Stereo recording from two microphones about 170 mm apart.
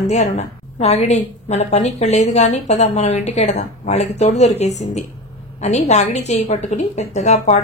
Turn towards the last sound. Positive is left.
turn(degrees=40)  # may be behind; listen again after turning